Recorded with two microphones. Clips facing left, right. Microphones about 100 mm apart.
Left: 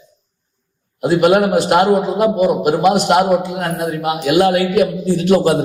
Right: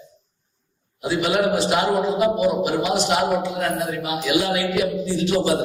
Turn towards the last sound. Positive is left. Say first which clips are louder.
# left 7 dB
turn(degrees=55)  # may be behind; listen again after turning